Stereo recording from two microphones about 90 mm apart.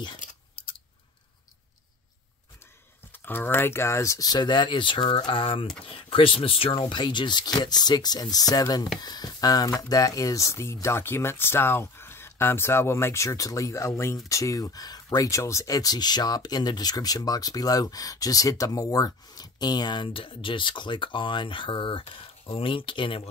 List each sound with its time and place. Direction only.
0.6 s scissors: 90° left
3.1 s speech: 25° left (ahead or behind); by 6.7 s 85° left
6.9 s speech: 60° left (ahead or behind)